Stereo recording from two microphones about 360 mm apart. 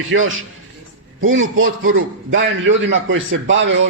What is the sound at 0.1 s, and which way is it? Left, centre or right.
A man's voice, right.